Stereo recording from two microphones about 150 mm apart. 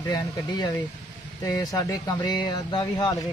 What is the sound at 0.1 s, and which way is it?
Speech, 25° left (ahead or behind).